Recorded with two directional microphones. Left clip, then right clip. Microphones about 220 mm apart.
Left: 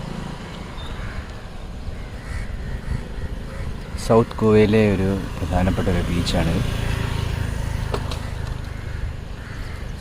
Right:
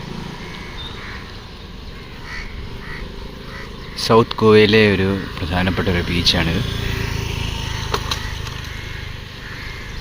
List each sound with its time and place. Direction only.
4.0 s speech: 5° left (ahead or behind)
6.5 s speech: 20° right (ahead or behind)
7.9 s vehicle: 25° right (ahead or behind)